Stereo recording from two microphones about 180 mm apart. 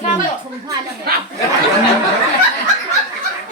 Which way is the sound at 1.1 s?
60° right (ahead or behind).